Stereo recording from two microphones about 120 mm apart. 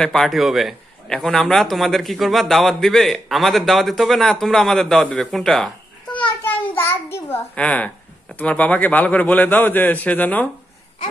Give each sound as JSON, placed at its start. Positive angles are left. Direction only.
{"t": 0.0, "sound": "a man's voice", "side_deg": 5}
{"t": 6.1, "sound": "a sound", "side_deg": 15}
{"t": 7.5, "sound": "speech", "side_deg": 10}